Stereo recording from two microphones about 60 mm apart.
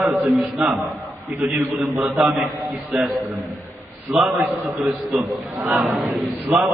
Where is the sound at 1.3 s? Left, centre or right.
Right.